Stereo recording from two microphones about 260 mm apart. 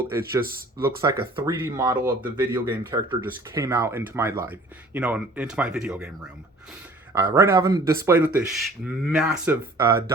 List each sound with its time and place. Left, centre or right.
0.1 s speech: centre
7.1 s speech: centre
9.2 s speech: centre